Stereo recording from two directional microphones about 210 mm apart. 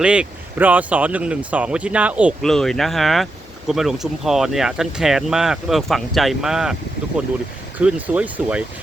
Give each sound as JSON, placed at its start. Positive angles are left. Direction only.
{"t": 0.0, "sound": "speech", "side_deg": -5}
{"t": 7.8, "sound": "speech", "side_deg": -5}